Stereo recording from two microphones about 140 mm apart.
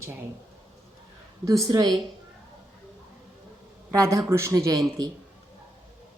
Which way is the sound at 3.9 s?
20° right (ahead or behind).